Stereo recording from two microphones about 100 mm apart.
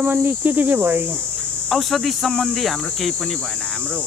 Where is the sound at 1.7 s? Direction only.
Centre (ahead or behind).